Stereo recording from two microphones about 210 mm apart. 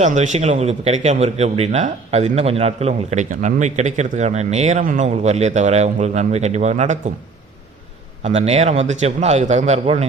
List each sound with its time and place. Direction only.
0.0 s speech: 35° right (ahead or behind)
8.2 s speech: 30° right (ahead or behind)